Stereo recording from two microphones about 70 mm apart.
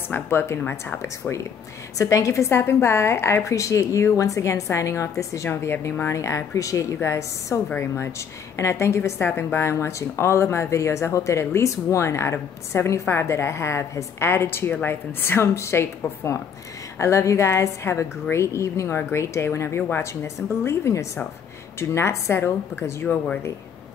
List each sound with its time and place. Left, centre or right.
0.1 s a woman's voice: left
2.0 s a woman's voice: left
6.1 s a woman's voice: left
7.7 s a woman's voice: left
8.5 s a woman's voice: left